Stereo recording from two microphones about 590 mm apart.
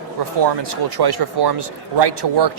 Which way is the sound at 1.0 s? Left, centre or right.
Right.